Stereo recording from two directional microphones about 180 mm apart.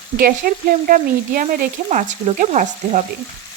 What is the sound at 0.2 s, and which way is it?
Speech, 55° right (ahead or behind).